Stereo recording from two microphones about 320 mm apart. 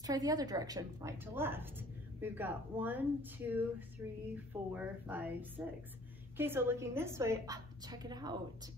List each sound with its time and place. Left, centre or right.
0.0 s a woman's voice: centre